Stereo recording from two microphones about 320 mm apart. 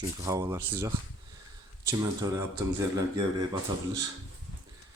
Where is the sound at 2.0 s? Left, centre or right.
Centre.